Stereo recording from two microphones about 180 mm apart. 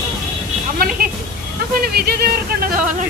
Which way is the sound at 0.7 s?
50° right (ahead or behind).